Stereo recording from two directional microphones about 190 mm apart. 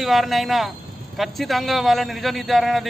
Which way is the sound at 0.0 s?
Centre (ahead or behind).